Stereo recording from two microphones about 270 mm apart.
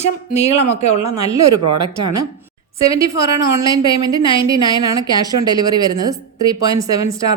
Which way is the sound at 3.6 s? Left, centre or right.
Centre.